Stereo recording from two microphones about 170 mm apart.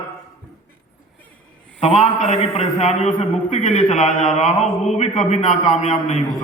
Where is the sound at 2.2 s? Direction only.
35° left (ahead or behind).